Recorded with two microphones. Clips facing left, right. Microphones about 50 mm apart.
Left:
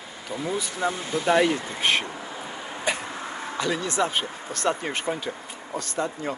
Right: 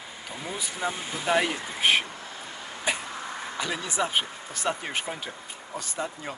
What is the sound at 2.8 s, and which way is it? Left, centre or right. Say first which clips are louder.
Cough: left 2 dB; centre.